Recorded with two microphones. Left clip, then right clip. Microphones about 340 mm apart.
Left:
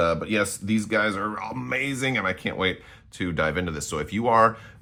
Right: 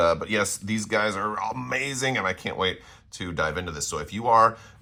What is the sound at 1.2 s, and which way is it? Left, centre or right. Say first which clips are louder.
Speech: right 2 dB; centre.